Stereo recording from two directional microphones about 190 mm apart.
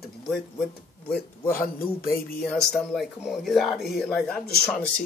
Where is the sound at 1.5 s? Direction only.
50° left (ahead or behind).